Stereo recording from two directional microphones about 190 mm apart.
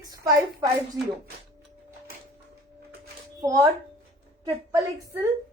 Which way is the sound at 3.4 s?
15° right (ahead or behind).